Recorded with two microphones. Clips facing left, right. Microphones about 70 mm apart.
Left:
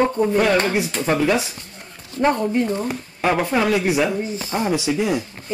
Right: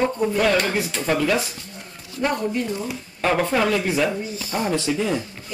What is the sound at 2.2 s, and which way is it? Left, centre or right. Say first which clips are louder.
Speech: left 5 dB; left.